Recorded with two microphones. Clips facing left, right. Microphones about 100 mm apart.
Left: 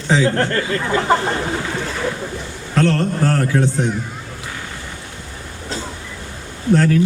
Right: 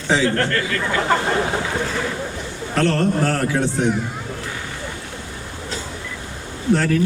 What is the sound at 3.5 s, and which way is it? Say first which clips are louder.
Speech: left 5 dB; centre (ahead or behind).